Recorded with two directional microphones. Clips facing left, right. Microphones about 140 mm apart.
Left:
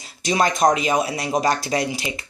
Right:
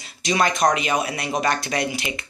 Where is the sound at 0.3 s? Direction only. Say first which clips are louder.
Left 2 dB; 25° left (ahead or behind).